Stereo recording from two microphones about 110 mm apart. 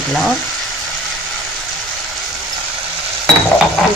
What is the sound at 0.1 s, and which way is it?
Stir, centre (ahead or behind).